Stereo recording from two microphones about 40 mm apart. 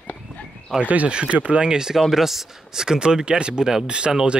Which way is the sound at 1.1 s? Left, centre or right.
Right.